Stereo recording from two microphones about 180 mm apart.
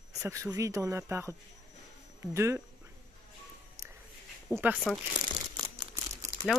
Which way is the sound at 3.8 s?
20° right (ahead or behind).